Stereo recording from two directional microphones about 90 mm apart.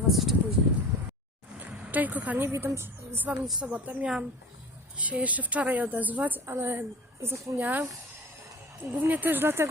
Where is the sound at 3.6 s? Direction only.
15° right (ahead or behind); by 7.6 s 30° right (ahead or behind).